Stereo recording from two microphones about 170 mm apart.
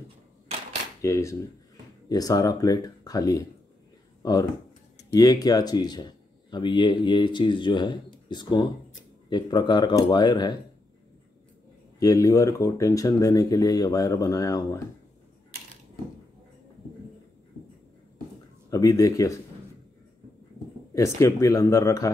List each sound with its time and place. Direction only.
1.0 s speech: 15° left (ahead or behind)
12.0 s speech: 20° left (ahead or behind)
18.7 s speech: 20° left (ahead or behind)
20.9 s speech: 15° left (ahead or behind)